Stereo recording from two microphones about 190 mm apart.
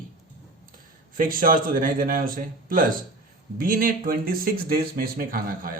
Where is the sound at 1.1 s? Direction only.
45° right (ahead or behind).